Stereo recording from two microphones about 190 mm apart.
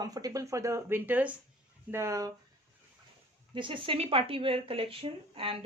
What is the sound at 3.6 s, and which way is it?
Speech, 25° right (ahead or behind).